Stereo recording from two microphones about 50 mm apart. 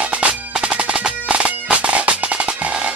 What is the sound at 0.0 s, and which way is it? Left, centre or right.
Music, right.